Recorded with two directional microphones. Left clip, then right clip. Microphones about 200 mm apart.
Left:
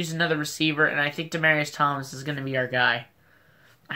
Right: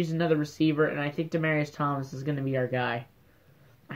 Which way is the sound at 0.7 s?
45° left (ahead or behind).